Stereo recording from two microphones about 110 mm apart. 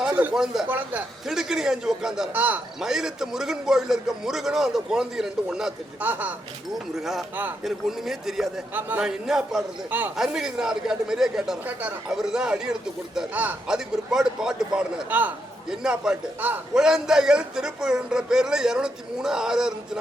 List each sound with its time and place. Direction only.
0.0 s a man's voice: 15° right (ahead or behind)
1.3 s a man's voice: 5° right (ahead or behind)
6.0 s speech: 15° right (ahead or behind)
6.9 s a man's voice: 5° right (ahead or behind)
8.7 s speech: 15° right (ahead or behind)
9.0 s a man's voice: 5° right (ahead or behind)
11.6 s speech: 15° right (ahead or behind)
12.1 s a man's voice: 5° right (ahead or behind)